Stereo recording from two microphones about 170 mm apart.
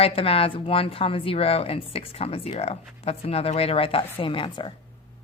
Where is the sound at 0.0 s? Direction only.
35° left (ahead or behind).